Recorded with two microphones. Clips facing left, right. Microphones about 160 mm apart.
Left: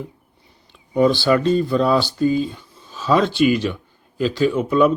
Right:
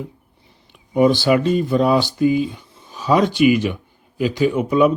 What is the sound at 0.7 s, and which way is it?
Speech, 20° right (ahead or behind).